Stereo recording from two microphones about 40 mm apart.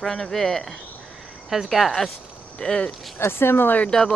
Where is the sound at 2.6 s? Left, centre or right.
Centre.